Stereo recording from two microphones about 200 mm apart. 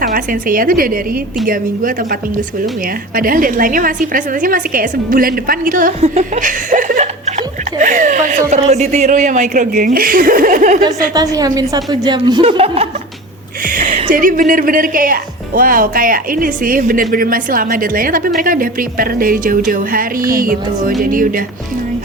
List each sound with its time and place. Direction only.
0.0 s speech: 45° right (ahead or behind)
11.1 s speech: 20° right (ahead or behind)
13.7 s speech: 45° right (ahead or behind)